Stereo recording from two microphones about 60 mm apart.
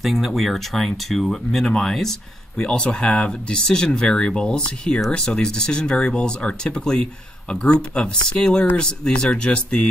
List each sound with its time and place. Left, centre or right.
0.0 s speech: centre